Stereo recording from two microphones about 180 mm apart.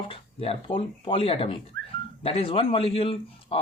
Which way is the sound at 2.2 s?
30° left (ahead or behind).